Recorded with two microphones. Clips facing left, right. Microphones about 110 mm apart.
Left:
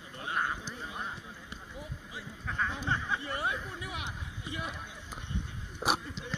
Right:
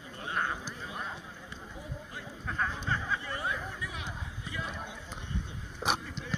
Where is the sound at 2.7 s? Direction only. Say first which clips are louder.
Even; 20° left (ahead or behind).